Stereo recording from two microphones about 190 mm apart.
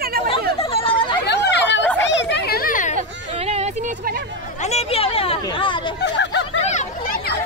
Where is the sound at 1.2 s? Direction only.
65° left (ahead or behind); by 3.0 s 45° left (ahead or behind).